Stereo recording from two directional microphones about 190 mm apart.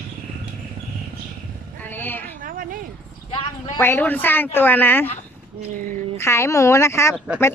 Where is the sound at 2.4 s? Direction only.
45° right (ahead or behind).